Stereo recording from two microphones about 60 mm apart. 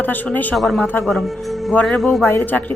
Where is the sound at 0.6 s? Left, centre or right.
Centre.